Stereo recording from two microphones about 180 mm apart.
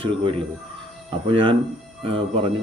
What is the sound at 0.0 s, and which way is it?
Speech, 30° right (ahead or behind).